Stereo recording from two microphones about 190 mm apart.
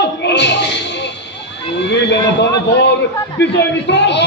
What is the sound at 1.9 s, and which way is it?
Speech, 65° left (ahead or behind).